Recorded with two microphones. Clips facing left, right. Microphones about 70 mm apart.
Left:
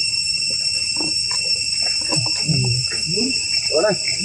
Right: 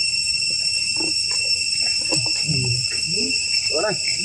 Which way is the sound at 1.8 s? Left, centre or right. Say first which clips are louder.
Left 2 dB; centre.